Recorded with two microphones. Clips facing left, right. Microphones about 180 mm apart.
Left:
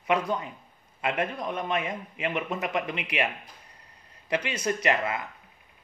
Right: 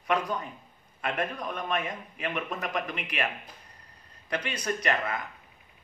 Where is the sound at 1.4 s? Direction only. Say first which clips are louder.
Left 2 dB; 25° left (ahead or behind).